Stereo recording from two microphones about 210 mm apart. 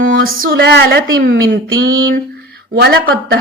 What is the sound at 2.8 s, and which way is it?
Speech, 55° right (ahead or behind).